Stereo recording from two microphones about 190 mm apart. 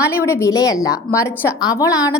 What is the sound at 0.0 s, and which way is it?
A woman's voice, 15° left (ahead or behind).